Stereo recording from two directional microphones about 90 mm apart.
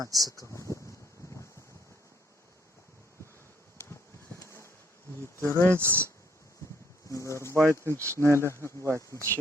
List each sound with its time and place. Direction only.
0.0 s speech: 45° right (ahead or behind)
0.5 s a sound: 35° left (ahead or behind)
4.3 s bee: 15° left (ahead or behind)
5.4 s speech: 25° left (ahead or behind)
5.7 s speech: 25° right (ahead or behind)
7.1 s speech: 35° left (ahead or behind)
7.5 s speech: 30° right (ahead or behind)
8.4 s speech: 30° left (ahead or behind)